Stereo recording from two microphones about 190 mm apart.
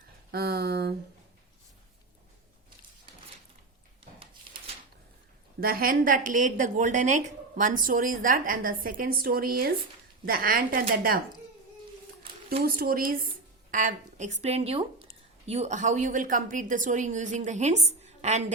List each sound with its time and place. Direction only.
0.3 s speech: 55° right (ahead or behind)
5.5 s a woman's voice: 50° right (ahead or behind)
12.6 s a woman's voice: 50° right (ahead or behind)